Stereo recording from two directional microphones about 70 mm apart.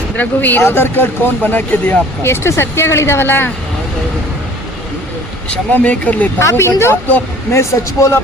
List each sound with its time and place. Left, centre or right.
0.2 s speech: left
5.7 s speech: left
6.4 s speech: left